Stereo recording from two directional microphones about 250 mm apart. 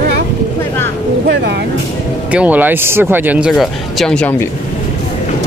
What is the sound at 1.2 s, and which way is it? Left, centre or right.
Vehicle, right.